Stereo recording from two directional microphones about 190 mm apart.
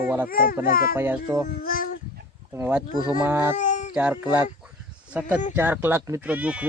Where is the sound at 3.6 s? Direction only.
40° left (ahead or behind).